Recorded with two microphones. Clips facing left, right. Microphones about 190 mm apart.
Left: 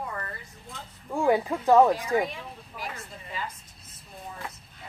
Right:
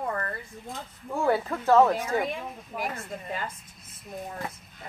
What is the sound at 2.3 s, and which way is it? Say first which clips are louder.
Speech: right 6 dB; 55° right (ahead or behind).